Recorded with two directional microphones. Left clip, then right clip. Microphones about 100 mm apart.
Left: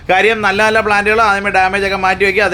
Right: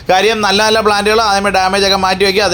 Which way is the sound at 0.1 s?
35° right (ahead or behind).